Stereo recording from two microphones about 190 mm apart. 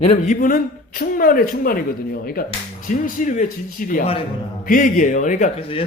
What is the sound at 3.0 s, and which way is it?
Speech, 45° left (ahead or behind).